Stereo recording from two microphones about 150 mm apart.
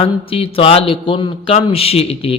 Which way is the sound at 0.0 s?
40° left (ahead or behind).